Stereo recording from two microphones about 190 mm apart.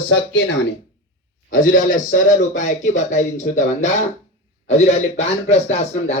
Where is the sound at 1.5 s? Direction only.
45° left (ahead or behind).